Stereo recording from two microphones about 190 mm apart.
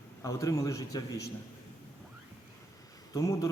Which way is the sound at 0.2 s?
15° left (ahead or behind).